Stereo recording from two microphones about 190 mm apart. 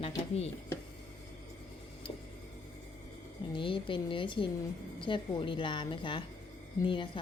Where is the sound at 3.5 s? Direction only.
25° left (ahead or behind).